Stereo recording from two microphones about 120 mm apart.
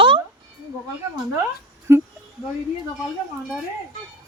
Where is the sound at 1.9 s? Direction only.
20° right (ahead or behind).